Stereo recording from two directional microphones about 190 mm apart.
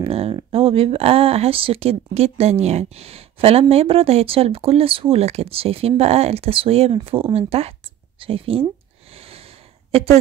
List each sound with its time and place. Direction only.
0.0 s speech: 30° right (ahead or behind)
9.1 s snort: 30° right (ahead or behind)